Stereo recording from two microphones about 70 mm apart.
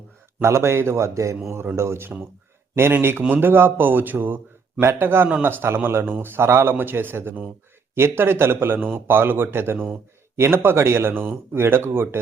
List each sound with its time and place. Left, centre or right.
0.4 s a man's voice: right